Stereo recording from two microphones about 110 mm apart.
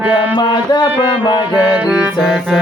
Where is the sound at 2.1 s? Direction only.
Centre (ahead or behind).